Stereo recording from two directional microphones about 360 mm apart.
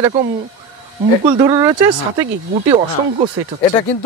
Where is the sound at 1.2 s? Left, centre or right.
Centre.